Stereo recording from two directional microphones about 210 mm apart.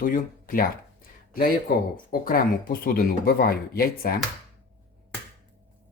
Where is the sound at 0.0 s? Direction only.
40° left (ahead or behind).